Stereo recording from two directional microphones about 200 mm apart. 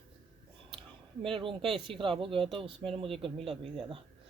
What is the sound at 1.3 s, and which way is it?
Speech, 25° right (ahead or behind).